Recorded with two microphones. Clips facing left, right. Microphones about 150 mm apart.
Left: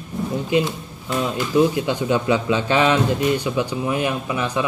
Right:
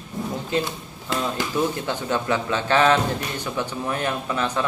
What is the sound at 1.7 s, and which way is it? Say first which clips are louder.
A man's voice: left 5 dB; 15° left (ahead or behind).